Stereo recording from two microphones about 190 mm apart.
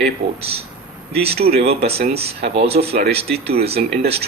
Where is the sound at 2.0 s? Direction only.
30° right (ahead or behind).